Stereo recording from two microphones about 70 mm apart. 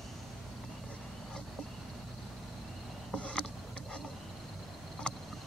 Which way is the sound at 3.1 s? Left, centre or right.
Centre.